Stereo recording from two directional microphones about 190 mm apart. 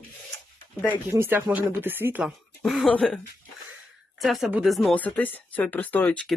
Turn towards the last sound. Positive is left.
turn(degrees=10)  # may be behind; listen again after turning